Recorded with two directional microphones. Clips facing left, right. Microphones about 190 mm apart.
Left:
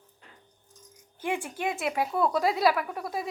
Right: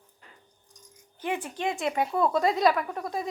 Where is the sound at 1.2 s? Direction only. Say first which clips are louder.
Even; 10° left (ahead or behind).